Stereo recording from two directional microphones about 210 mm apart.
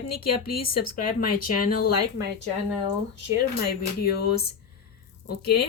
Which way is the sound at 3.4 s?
50° left (ahead or behind).